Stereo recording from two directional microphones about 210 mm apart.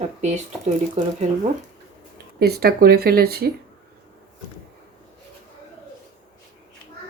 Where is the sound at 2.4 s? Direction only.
50° right (ahead or behind).